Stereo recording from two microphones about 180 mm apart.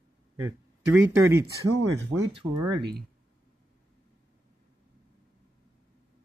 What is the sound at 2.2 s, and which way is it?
Speech, 30° right (ahead or behind).